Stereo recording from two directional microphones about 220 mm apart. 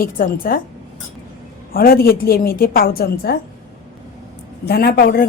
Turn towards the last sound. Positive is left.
turn(degrees=40)  # may be behind; listen again after turning